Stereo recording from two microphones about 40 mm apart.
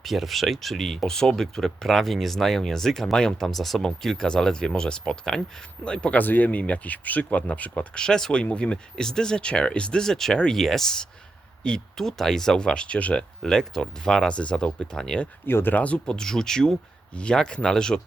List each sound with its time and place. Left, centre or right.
0.0 s speech: centre
3.4 s speech: centre; by 6.1 s left
6.1 s speech: left
7.8 s speech: centre
8.4 s speech: left
12.0 s speech: centre
12.5 s speech: left
13.4 s speech: centre
14.3 s speech: left
14.5 s speech: centre
15.4 s speech: left
15.7 s speech: left
16.0 s speech: centre